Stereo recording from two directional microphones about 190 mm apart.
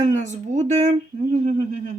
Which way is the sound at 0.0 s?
40° right (ahead or behind).